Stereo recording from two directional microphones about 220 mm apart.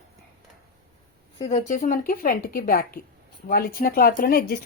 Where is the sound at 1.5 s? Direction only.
35° left (ahead or behind).